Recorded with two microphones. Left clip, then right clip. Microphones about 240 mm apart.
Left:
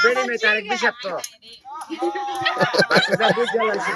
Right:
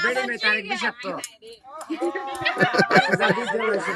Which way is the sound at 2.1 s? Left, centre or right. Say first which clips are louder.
Left 5 dB; centre.